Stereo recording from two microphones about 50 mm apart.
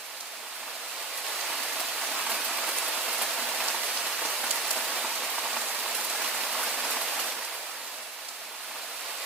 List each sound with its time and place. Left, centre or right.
1.4 s rain: centre
4.0 s rain on surface: centre
6.1 s rain: centre